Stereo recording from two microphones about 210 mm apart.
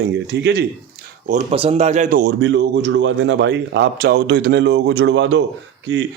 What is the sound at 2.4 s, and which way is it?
A man's voice, 55° right (ahead or behind).